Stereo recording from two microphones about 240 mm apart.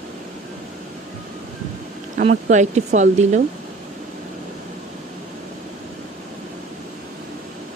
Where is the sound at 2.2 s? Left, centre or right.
Right.